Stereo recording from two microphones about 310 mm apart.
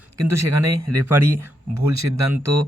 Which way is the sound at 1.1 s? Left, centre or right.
Centre.